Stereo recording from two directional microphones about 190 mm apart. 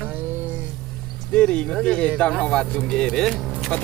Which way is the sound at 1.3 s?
5° left (ahead or behind).